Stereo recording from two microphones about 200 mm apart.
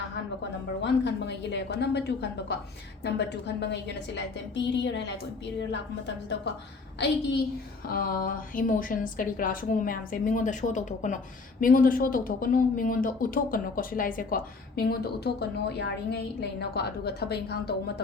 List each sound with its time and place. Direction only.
0.8 s a woman's voice: 60° left (ahead or behind)
7.9 s speech: 45° left (ahead or behind)